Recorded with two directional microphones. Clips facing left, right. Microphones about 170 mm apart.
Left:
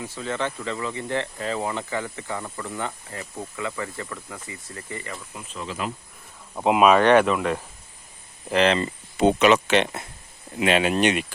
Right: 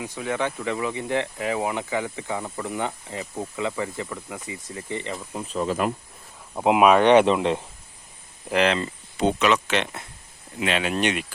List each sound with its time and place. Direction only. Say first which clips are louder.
0.0 s speech: right 2 dB; 15° right (ahead or behind); by 5.9 s 50° right (ahead or behind)
6.5 s speech: even; 15° right (ahead or behind)
8.4 s speech: left 1 dB; 10° right (ahead or behind)
9.1 s speech: left 4 dB; 5° left (ahead or behind)
10.7 s speech: left 5 dB; 45° left (ahead or behind)
10.9 s speech: left 3 dB; centre (ahead or behind)